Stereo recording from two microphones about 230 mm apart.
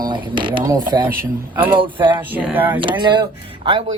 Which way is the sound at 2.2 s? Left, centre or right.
Centre.